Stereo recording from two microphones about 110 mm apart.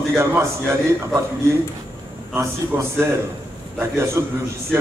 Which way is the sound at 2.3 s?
20° right (ahead or behind).